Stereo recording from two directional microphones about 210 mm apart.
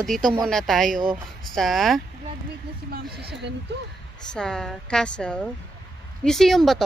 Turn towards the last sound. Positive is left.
turn(degrees=0)  # may be behind; listen again after turning